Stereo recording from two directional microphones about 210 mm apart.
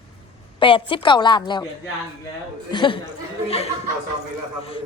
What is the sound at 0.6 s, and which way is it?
A woman's voice, 25° left (ahead or behind).